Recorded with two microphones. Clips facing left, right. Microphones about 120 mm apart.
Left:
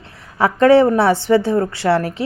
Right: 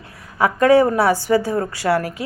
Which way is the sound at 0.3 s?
30° left (ahead or behind).